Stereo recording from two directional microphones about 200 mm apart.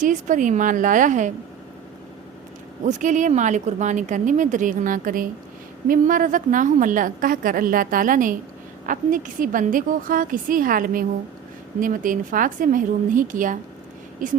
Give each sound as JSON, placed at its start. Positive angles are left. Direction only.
{"t": 0.0, "sound": "speech", "side_deg": -40}
{"t": 2.8, "sound": "a woman's voice", "side_deg": -40}